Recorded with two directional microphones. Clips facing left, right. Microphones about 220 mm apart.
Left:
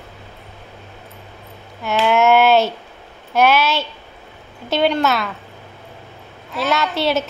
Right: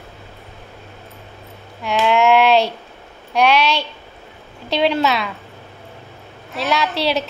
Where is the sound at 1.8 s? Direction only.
Centre (ahead or behind).